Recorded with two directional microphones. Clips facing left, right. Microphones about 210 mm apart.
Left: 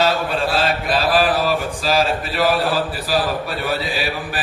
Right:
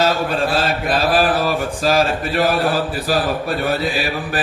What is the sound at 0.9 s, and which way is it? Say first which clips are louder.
Speech: right 2 dB; 45° right (ahead or behind).